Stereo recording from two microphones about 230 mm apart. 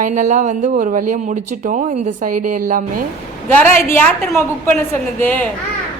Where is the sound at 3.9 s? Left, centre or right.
Centre.